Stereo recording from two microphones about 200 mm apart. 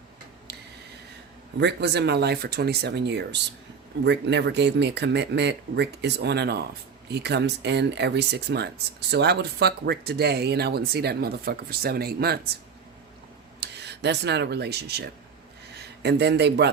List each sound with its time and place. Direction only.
0.5 s squish: 60° right (ahead or behind)
1.5 s speech: 60° right (ahead or behind)
13.6 s a man's voice: 60° right (ahead or behind)